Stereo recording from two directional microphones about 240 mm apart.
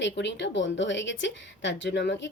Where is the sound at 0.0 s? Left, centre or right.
Left.